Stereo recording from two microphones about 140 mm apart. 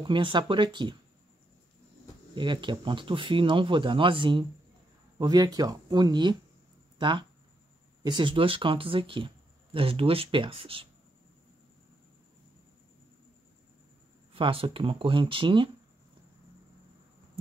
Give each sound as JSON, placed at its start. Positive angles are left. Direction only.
{"t": 0.0, "sound": "speech", "side_deg": -35}
{"t": 2.3, "sound": "speech", "side_deg": -35}
{"t": 14.3, "sound": "speech", "side_deg": -40}